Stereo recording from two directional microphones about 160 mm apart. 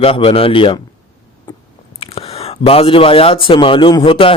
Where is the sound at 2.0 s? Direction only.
35° left (ahead or behind).